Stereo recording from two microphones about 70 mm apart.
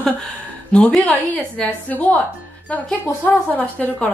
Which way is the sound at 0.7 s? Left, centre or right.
Centre.